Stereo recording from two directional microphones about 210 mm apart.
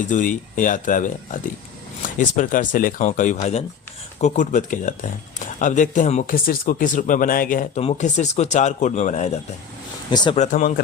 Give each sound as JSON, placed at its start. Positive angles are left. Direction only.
{"t": 0.1, "sound": "speech", "side_deg": 40}
{"t": 10.1, "sound": "speech", "side_deg": 20}
{"t": 10.3, "sound": "speech", "side_deg": 35}